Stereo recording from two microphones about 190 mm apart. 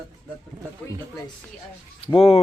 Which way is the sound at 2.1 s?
30° left (ahead or behind).